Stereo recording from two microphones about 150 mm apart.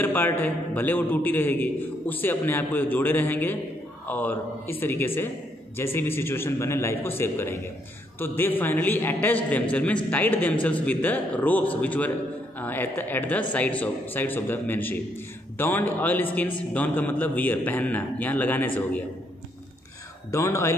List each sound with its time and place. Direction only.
0.0 s a man's voice: 15° left (ahead or behind)
20.2 s speech: 20° left (ahead or behind)